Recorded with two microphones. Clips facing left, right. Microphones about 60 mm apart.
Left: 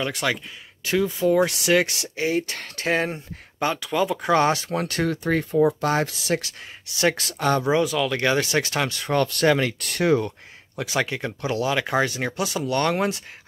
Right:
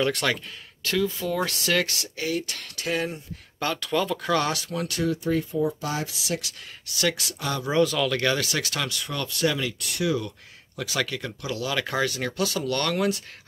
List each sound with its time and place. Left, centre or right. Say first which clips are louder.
0.0 s speech: right 1 dB; centre
0.8 s speech: left 5 dB; left
3.5 s speech: left 3 dB; centre; by 7.6 s left
7.6 s speech: left 1 dB; centre
8.2 s speech: left 4 dB; left
10.8 s speech: left 4 dB; left